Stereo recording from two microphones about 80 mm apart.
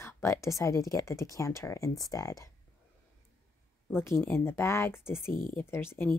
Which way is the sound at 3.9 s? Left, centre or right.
Left.